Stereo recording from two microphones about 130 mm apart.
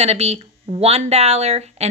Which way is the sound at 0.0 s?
55° right (ahead or behind).